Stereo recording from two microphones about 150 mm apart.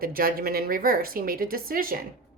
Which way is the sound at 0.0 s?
75° right (ahead or behind).